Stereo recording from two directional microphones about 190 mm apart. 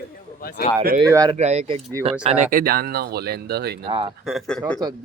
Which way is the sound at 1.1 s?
20° right (ahead or behind).